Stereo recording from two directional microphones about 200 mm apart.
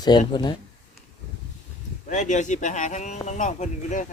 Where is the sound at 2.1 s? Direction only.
35° left (ahead or behind).